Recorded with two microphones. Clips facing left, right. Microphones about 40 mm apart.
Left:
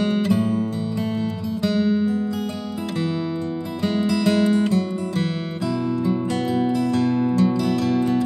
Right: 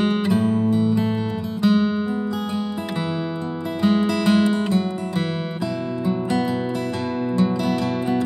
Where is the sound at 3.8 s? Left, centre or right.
Right.